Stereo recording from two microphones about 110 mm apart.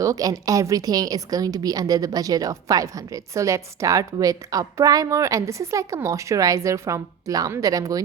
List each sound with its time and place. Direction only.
0.0 s a woman's voice: 35° right (ahead or behind)